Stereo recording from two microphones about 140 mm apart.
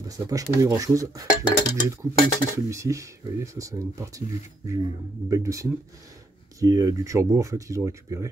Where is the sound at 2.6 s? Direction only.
20° right (ahead or behind).